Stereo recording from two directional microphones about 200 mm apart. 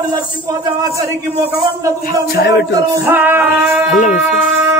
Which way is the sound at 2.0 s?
50° left (ahead or behind).